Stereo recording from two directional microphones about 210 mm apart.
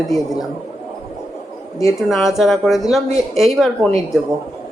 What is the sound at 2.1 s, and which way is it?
Speech, centre (ahead or behind).